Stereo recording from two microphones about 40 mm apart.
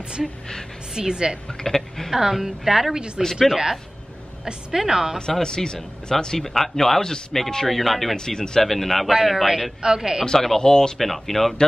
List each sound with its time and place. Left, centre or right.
0.9 s a woman's voice: centre
1.6 s speech: centre
2.0 s a woman's voice: centre
4.7 s a woman's voice: centre
5.4 s speech: centre
9.8 s a woman's voice: centre
10.2 s speech: centre
11.0 s speech: centre